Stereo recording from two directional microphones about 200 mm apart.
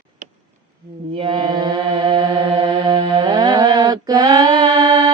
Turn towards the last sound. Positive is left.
turn(degrees=-25)  # may be behind; listen again after turning